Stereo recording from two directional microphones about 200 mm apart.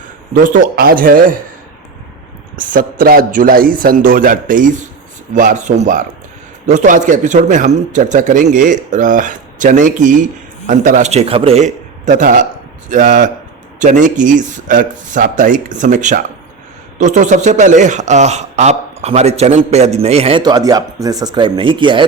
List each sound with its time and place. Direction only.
0.3 s a man's voice: 45° right (ahead or behind)
2.6 s a man's voice: 40° right (ahead or behind); by 22.0 s 25° right (ahead or behind)